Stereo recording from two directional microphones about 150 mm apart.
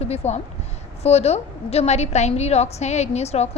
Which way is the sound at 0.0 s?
45° left (ahead or behind).